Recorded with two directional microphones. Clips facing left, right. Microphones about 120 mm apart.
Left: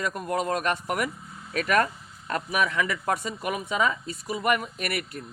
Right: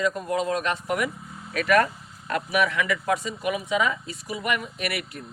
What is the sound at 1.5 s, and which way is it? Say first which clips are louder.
Speech: right 3 dB; 30° left (ahead or behind).